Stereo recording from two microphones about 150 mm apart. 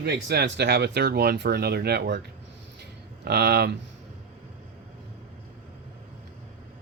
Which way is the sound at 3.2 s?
90° right.